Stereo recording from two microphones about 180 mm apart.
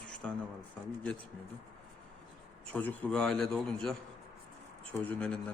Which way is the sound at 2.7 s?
10° left (ahead or behind).